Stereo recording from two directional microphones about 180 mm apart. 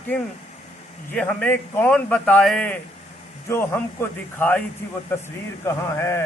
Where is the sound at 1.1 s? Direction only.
5° left (ahead or behind).